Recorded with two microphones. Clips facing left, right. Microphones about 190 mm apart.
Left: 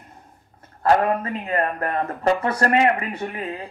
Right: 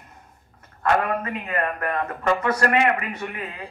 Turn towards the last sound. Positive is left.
turn(degrees=35)  # may be behind; listen again after turning